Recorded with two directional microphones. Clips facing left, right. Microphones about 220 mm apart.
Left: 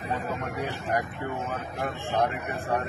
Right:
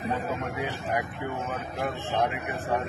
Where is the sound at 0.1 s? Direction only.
Centre (ahead or behind).